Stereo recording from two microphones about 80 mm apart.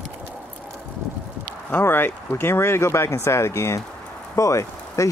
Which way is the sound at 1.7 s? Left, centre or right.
Left.